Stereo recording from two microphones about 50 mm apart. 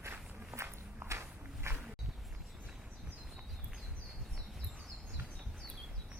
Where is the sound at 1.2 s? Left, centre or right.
Right.